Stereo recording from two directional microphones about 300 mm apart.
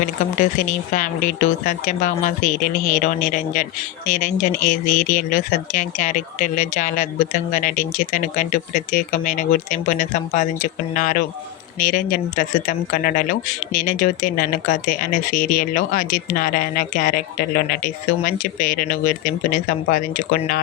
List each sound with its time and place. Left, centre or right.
0.0 s speech: left